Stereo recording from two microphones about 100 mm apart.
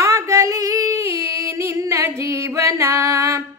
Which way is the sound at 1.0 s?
30° right (ahead or behind).